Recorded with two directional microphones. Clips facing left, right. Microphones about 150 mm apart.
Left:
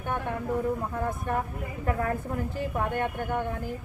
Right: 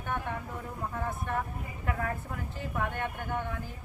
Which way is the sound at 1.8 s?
40° left (ahead or behind).